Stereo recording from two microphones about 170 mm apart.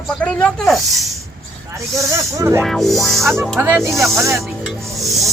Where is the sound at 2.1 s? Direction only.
15° right (ahead or behind).